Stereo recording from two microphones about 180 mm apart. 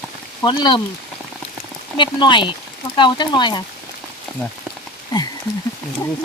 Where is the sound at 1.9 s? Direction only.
25° left (ahead or behind).